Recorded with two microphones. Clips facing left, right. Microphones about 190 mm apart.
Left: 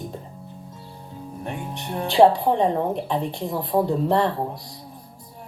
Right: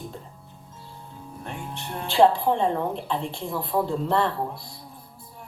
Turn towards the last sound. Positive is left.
turn(degrees=15)  # may be behind; listen again after turning